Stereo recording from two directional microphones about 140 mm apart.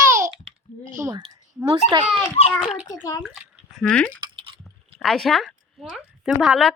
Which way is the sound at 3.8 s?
10° left (ahead or behind).